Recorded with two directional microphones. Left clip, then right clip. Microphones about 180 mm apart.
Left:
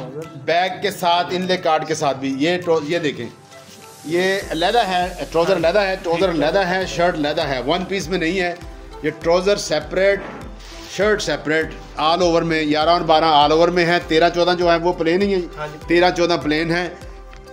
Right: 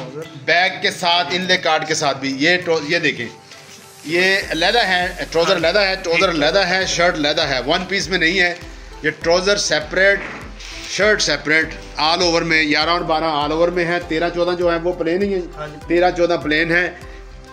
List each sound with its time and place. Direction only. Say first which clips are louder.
0.5 s a man's voice: right 3 dB; 15° left (ahead or behind)
12.0 s a man's voice: even; 55° left (ahead or behind)